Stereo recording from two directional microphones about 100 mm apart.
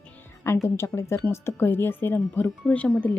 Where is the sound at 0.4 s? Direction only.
25° left (ahead or behind).